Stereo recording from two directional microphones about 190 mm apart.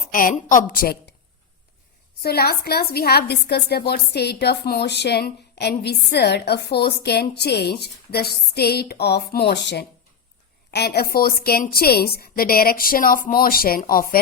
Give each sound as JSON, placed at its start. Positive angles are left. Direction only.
{"t": 0.0, "sound": "a woman's voice", "side_deg": 45}
{"t": 2.2, "sound": "a woman's voice", "side_deg": 55}